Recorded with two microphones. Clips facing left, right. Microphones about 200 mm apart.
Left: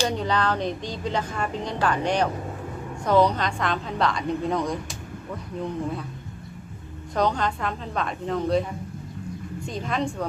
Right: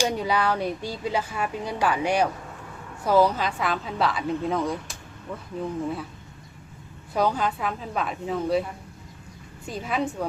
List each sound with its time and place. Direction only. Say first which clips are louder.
0.0 s a woman's voice: even; 10° right (ahead or behind)
7.1 s a woman's voice: even; 5° right (ahead or behind)
9.6 s a woman's voice: even; 5° right (ahead or behind)